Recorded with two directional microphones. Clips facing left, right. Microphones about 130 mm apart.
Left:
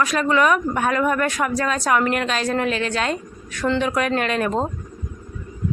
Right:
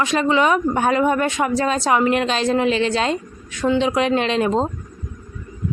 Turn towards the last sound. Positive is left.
turn(degrees=-20)  # may be behind; listen again after turning